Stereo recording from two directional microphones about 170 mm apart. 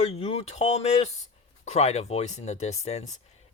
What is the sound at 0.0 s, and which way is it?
Speech, 40° left (ahead or behind).